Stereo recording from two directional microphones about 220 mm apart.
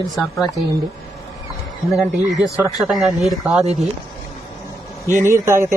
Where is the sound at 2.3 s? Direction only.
15° left (ahead or behind).